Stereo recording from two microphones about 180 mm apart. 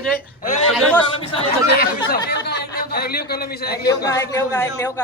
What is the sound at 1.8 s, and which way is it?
Speech, 60° left (ahead or behind).